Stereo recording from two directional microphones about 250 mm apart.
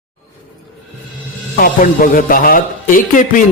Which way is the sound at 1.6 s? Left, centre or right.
Left.